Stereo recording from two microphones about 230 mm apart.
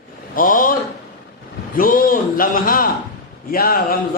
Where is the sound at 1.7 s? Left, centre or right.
Left.